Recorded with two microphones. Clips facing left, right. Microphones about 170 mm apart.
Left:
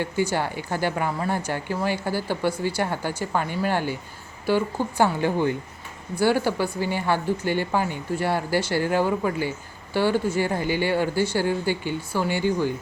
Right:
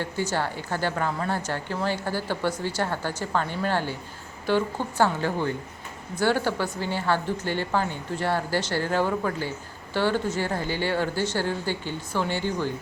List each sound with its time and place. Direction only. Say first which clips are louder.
0.0 s speech: left 3 dB; 15° left (ahead or behind)